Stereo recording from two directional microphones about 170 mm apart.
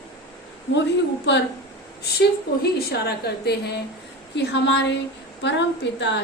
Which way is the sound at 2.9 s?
75° left (ahead or behind).